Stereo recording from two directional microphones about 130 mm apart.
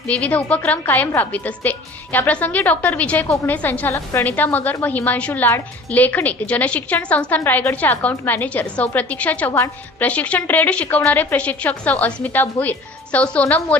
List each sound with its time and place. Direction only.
0.1 s a woman's voice: 10° left (ahead or behind)
9.5 s a woman's voice: 20° left (ahead or behind)
10.1 s a woman's voice: 10° left (ahead or behind)